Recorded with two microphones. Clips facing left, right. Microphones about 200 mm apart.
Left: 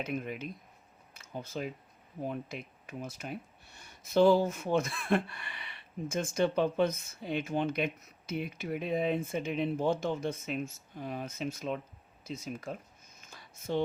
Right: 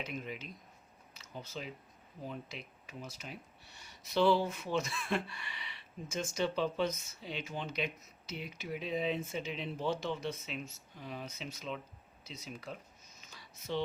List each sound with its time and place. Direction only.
0.0 s speech: 50° left (ahead or behind)
1.1 s camera: 50° left (ahead or behind)
2.2 s speech: 50° left (ahead or behind)
13.1 s a sound: 50° left (ahead or behind)